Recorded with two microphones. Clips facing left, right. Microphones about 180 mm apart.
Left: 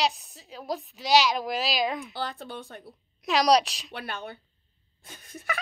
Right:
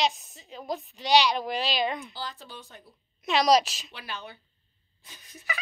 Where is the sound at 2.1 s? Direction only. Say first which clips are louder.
Left 5 dB; 55° left (ahead or behind).